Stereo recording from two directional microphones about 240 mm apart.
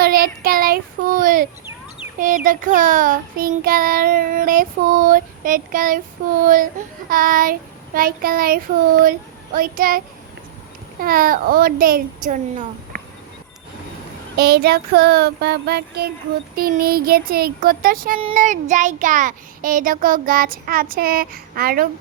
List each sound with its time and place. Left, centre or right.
0.0 s a child's voice: right
2.1 s child singing: right
11.0 s child singing: right
14.3 s child singing: right
18.2 s child singing: right